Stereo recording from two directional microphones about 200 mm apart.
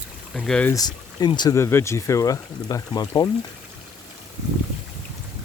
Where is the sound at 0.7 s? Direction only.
20° left (ahead or behind).